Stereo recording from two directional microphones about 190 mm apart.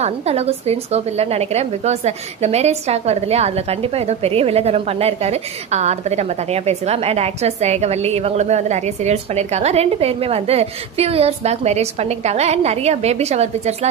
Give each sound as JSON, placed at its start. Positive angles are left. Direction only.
{"t": 0.0, "sound": "a woman's voice", "side_deg": -35}